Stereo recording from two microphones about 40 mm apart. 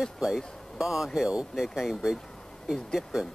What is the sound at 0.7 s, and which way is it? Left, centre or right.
Speech, centre.